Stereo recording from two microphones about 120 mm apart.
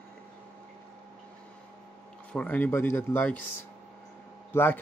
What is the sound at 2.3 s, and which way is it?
Speech, 15° left (ahead or behind).